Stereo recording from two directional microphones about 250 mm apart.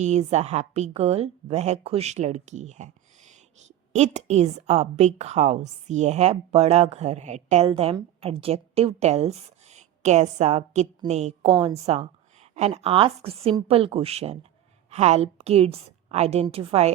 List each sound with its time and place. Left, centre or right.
0.0 s a woman's voice: right